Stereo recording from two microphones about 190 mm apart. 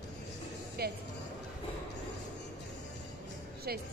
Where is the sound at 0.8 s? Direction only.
55° right (ahead or behind).